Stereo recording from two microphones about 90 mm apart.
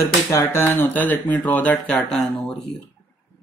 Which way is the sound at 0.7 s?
20° left (ahead or behind).